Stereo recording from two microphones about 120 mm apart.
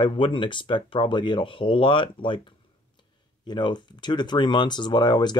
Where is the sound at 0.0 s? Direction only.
45° left (ahead or behind).